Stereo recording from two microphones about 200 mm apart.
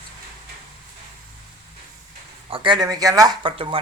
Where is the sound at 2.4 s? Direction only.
25° right (ahead or behind).